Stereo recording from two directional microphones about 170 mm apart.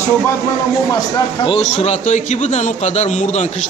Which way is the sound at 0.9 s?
25° left (ahead or behind).